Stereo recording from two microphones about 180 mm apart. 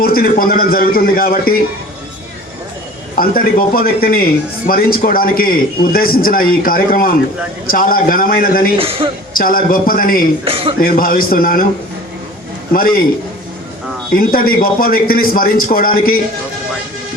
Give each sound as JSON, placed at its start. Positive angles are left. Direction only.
{"t": 0.0, "sound": "a man's voice", "side_deg": 55}
{"t": 3.2, "sound": "a man's voice", "side_deg": 55}
{"t": 8.8, "sound": "speech", "side_deg": -30}
{"t": 9.4, "sound": "a man's voice", "side_deg": 55}
{"t": 10.4, "sound": "speech", "side_deg": -30}
{"t": 10.8, "sound": "a man's voice", "side_deg": 55}
{"t": 12.7, "sound": "a man's voice", "side_deg": 55}
{"t": 14.1, "sound": "a man's voice", "side_deg": 55}